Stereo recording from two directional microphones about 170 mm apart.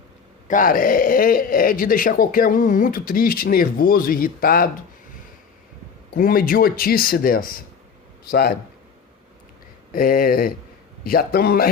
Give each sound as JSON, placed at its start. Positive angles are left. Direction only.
{"t": 0.4, "sound": "speech", "side_deg": 50}
{"t": 6.1, "sound": "speech", "side_deg": 55}
{"t": 9.9, "sound": "speech", "side_deg": 55}